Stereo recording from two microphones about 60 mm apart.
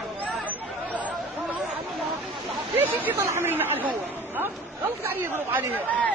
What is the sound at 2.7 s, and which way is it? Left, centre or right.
Hubbub, right.